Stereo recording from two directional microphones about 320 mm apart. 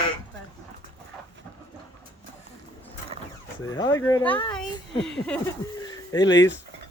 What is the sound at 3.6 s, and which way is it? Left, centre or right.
Speech, centre.